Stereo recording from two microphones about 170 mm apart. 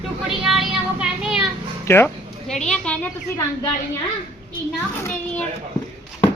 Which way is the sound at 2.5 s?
5° left (ahead or behind).